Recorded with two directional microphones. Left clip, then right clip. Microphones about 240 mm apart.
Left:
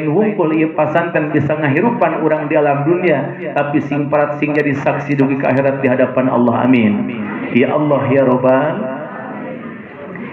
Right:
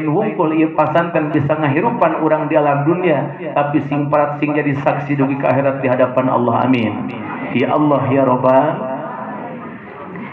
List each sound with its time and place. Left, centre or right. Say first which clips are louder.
0.2 s speech: left 1 dB; left